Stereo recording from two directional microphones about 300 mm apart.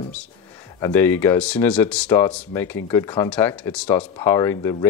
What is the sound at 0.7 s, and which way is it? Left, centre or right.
Speech, centre.